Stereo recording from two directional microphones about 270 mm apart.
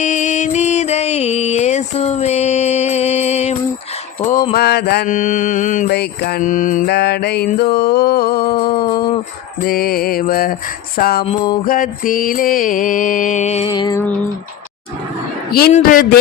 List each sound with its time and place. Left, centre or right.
0.0 s music: left
4.2 s mantra: left
8.8 s a sound: centre
9.6 s mantra: left
11.2 s mantra: centre
11.6 s mantra: left; by 14.1 s centre
15.5 s mantra: left